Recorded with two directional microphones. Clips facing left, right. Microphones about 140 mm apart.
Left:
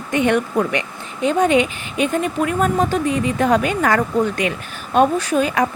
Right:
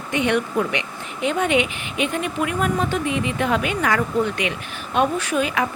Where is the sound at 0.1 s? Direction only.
45° left (ahead or behind).